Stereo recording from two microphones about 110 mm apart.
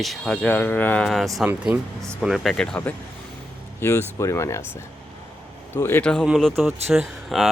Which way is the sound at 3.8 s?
25° left (ahead or behind).